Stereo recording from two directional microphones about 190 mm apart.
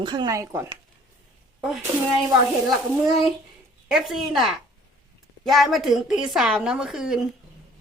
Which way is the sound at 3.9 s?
Centre (ahead or behind).